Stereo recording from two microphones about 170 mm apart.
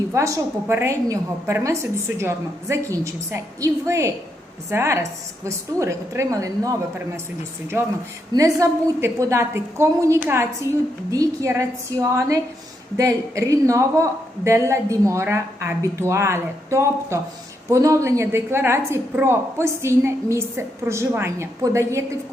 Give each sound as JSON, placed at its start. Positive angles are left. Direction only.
{"t": 0.1, "sound": "a woman's voice", "side_deg": -20}
{"t": 8.3, "sound": "a woman's voice", "side_deg": -20}